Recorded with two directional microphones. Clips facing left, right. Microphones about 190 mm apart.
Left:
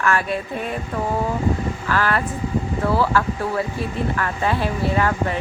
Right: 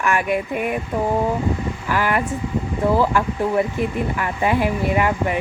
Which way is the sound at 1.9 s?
15° right (ahead or behind).